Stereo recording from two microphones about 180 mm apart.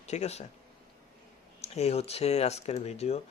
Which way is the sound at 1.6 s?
35° left (ahead or behind).